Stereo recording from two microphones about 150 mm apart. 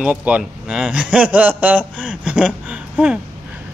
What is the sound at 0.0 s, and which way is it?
A man's voice, 10° right (ahead or behind).